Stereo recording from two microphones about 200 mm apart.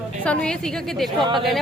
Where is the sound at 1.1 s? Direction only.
25° right (ahead or behind).